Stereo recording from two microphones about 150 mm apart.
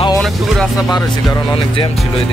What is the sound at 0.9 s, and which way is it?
Speech, 25° left (ahead or behind).